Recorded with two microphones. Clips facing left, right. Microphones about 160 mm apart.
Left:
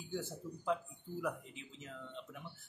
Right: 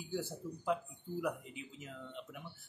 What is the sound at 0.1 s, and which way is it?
Speech, 10° right (ahead or behind).